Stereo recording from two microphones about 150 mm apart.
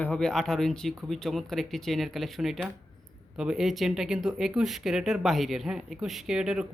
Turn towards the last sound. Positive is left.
turn(degrees=-5)  # may be behind; listen again after turning